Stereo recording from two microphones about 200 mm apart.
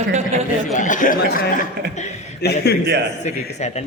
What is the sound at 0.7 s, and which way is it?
Speech, 40° left (ahead or behind).